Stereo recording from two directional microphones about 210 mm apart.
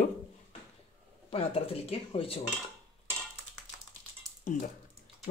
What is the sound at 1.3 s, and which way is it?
Speech, 25° left (ahead or behind).